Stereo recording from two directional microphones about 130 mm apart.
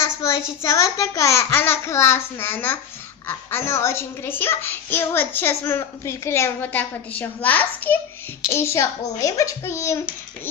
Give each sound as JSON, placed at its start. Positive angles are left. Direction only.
{"t": 0.2, "sound": "a child's voice", "side_deg": 20}